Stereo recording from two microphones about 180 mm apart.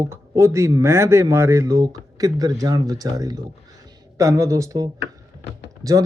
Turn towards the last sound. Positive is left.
turn(degrees=-20)  # may be behind; listen again after turning